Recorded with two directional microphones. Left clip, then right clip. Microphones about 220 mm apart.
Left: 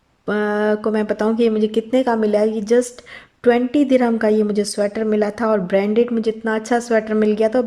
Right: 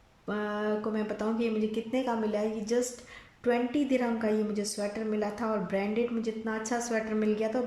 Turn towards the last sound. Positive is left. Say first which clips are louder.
# left 13 dB
turn(degrees=35)  # may be behind; listen again after turning